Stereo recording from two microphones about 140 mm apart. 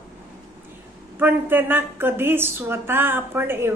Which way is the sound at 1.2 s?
15° right (ahead or behind).